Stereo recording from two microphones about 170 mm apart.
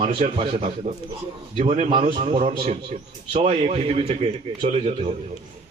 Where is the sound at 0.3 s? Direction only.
30° right (ahead or behind).